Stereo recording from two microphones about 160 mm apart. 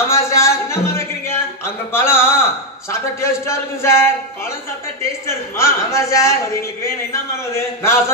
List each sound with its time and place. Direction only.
0.1 s a sound: 15° left (ahead or behind)
2.9 s a man's voice: 15° left (ahead or behind)
5.2 s a man's voice: 15° left (ahead or behind)